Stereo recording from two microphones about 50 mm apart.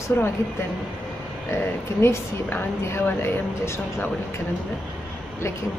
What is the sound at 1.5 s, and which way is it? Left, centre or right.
Speech, left.